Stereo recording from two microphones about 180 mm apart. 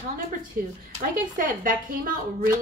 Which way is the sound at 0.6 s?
50° right (ahead or behind).